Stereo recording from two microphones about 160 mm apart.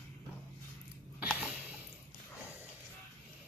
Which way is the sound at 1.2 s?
5° right (ahead or behind).